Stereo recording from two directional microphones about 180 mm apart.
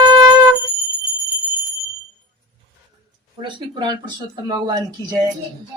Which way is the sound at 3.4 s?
25° right (ahead or behind).